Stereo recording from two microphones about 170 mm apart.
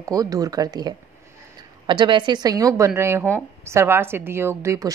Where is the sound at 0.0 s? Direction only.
20° right (ahead or behind).